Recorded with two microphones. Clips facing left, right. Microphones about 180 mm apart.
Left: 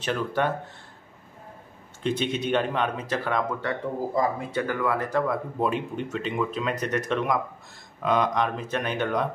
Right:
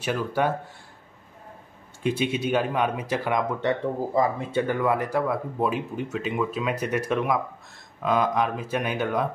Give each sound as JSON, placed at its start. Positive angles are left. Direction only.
{"t": 0.0, "sound": "speech", "side_deg": -10}
{"t": 2.0, "sound": "speech", "side_deg": -10}
{"t": 4.1, "sound": "speech", "side_deg": -25}